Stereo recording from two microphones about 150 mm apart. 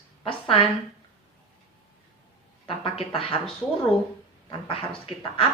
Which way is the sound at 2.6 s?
35° left (ahead or behind).